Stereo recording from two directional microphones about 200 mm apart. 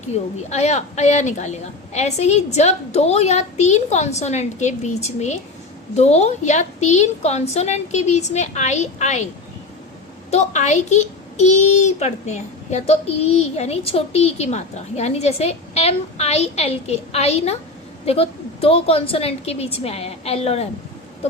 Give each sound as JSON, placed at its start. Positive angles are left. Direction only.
{"t": 0.1, "sound": "a child's voice", "side_deg": 35}
{"t": 10.3, "sound": "a child's voice", "side_deg": 35}